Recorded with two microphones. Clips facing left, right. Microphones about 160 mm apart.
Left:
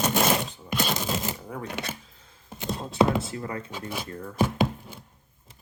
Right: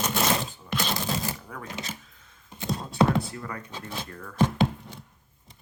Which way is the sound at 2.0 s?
30° left (ahead or behind).